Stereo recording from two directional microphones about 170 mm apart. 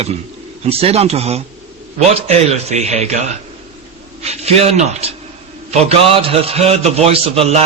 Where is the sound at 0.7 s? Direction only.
35° right (ahead or behind).